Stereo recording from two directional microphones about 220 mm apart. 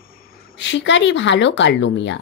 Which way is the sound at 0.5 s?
55° left (ahead or behind).